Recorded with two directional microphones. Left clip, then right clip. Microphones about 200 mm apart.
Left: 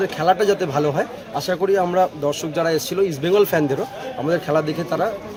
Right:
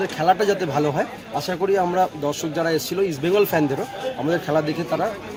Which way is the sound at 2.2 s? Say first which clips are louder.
Left 2 dB; 10° left (ahead or behind).